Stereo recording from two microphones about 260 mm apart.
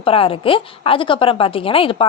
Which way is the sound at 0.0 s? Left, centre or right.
Left.